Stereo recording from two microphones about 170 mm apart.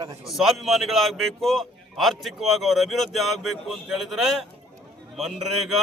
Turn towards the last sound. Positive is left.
turn(degrees=0)  # may be behind; listen again after turning